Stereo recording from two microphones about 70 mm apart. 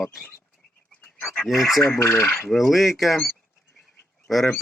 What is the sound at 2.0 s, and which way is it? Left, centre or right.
Speech, left.